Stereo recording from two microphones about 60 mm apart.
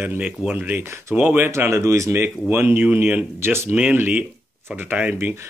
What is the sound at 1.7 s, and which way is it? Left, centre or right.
Speech, right.